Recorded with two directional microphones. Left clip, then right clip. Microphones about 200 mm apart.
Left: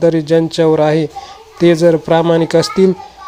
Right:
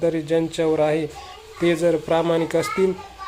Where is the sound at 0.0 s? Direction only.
35° left (ahead or behind).